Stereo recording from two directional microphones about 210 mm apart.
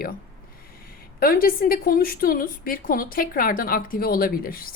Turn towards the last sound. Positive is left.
turn(degrees=45)  # may be behind; listen again after turning